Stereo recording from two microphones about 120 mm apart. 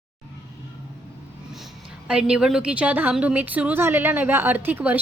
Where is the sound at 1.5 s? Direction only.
5° right (ahead or behind).